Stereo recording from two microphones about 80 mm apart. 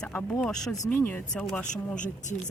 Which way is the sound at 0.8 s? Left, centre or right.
Left.